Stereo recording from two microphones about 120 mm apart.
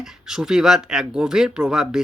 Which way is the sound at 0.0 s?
5° right (ahead or behind).